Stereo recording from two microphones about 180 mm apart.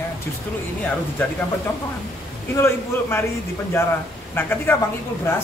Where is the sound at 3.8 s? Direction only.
15° left (ahead or behind).